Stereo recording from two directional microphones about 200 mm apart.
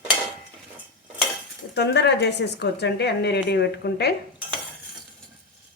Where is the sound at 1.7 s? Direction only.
55° left (ahead or behind).